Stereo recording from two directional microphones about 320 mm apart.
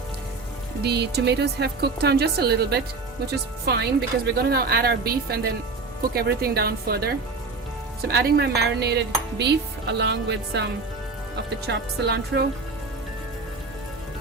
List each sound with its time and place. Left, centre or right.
0.8 s speech: right